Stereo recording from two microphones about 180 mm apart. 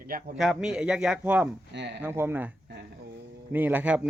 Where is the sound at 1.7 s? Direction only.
75° right (ahead or behind).